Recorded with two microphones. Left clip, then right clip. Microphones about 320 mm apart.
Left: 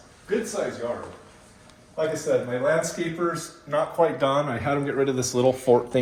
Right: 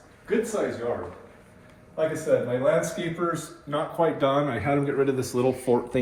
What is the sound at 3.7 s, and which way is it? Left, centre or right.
Speech, left.